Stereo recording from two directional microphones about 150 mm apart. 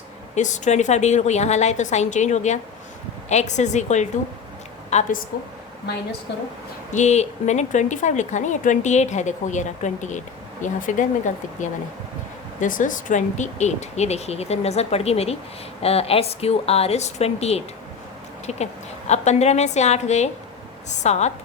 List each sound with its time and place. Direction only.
0.3 s speech: 55° left (ahead or behind)
5.3 s a woman's voice: 75° left (ahead or behind)
6.9 s speech: 50° left (ahead or behind)
12.5 s speech: 60° left (ahead or behind)